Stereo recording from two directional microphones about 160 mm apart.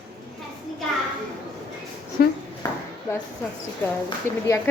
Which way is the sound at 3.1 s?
20° left (ahead or behind).